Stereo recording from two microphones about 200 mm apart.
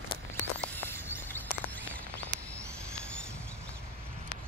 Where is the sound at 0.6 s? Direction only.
10° left (ahead or behind).